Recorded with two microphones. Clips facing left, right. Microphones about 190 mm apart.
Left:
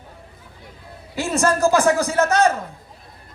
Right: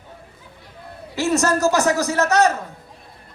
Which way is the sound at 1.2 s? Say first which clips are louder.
Even; 30° left (ahead or behind).